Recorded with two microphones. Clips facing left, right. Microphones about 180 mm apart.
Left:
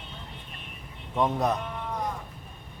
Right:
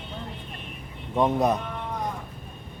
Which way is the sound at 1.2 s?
10° right (ahead or behind).